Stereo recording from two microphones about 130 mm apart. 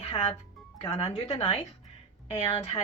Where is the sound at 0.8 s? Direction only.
55° left (ahead or behind).